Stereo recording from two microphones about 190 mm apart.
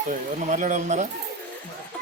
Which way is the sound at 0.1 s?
40° right (ahead or behind).